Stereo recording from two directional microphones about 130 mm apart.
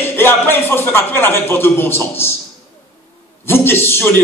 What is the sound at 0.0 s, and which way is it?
A man's voice, 15° left (ahead or behind).